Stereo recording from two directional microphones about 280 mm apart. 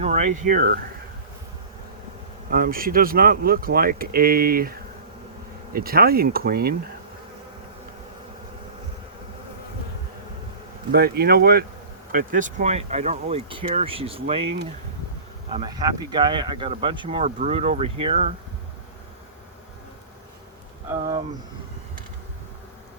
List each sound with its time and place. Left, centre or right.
0.0 s speech: right
2.5 s speech: right
5.7 s speech: right
10.9 s speech: right